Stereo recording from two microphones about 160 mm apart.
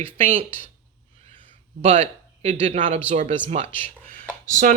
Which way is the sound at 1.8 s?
40° right (ahead or behind).